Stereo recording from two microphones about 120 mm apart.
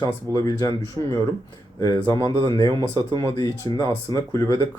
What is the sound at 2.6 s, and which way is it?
Speech, 25° right (ahead or behind).